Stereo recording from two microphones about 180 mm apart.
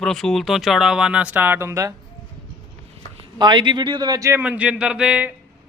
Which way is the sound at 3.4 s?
25° right (ahead or behind).